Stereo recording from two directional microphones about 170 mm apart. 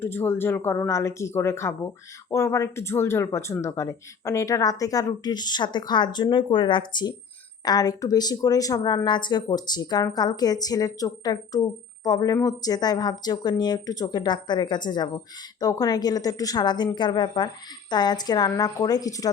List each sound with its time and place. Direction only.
0.0 s speech: 10° left (ahead or behind)